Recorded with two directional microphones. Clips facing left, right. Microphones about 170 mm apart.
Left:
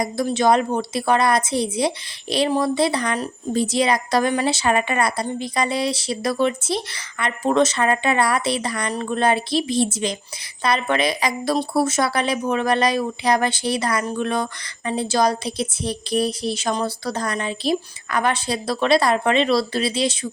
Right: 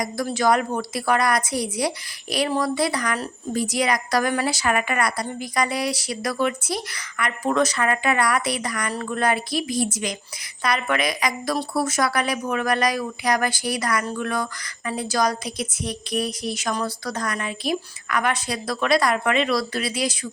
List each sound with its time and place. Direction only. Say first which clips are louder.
0.0 s a woman's voice: left 3 dB; 25° left (ahead or behind)